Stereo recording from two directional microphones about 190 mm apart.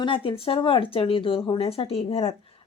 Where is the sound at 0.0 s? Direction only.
25° left (ahead or behind).